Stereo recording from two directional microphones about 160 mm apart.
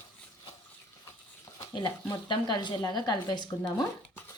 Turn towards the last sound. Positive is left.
turn(degrees=25)  # may be behind; listen again after turning